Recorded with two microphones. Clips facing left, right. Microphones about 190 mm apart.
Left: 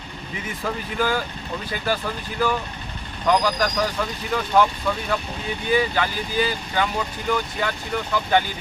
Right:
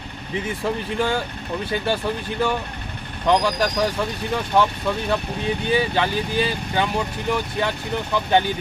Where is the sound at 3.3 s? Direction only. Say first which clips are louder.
Right 1 dB; 25° right (ahead or behind).